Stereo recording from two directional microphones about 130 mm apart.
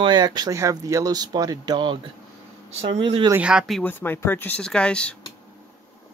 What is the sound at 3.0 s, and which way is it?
Speech, 40° right (ahead or behind).